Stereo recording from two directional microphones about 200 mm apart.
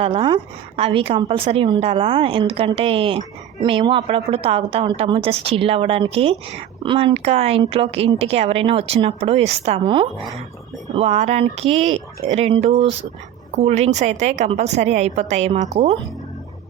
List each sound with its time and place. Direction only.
0.0 s a woman's voice: 25° right (ahead or behind)